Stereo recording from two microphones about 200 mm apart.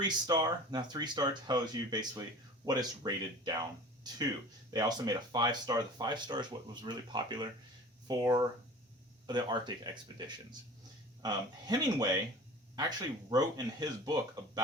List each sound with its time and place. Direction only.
0.3 s speech: 20° right (ahead or behind)